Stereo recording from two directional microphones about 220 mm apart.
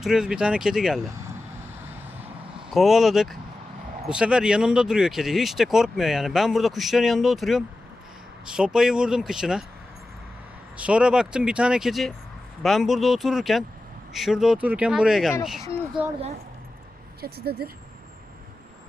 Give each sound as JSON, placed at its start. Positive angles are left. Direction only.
{"t": 0.0, "sound": "speech", "side_deg": 0}
{"t": 2.6, "sound": "speech", "side_deg": 0}
{"t": 10.8, "sound": "speech", "side_deg": -5}
{"t": 17.2, "sound": "speech", "side_deg": -45}